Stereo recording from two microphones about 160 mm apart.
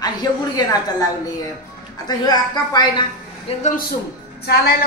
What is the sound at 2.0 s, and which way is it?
Speech, 25° left (ahead or behind).